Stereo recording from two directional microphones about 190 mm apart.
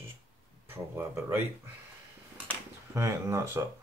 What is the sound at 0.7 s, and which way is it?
Speech, 10° right (ahead or behind).